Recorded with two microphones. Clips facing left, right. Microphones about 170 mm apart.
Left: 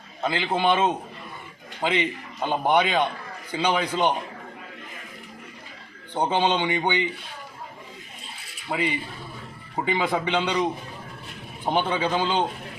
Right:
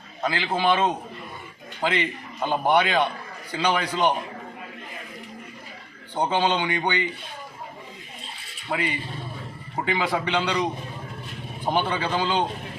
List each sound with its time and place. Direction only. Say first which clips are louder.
0.2 s a man's voice: left 1 dB; centre (ahead or behind)
2.4 s a man's voice: even; 5° right (ahead or behind)
6.2 s a man's voice: left 1 dB; 10° left (ahead or behind)
8.7 s a man's voice: left 1 dB; 5° left (ahead or behind)
11.7 s a man's voice: left 1 dB; 15° left (ahead or behind)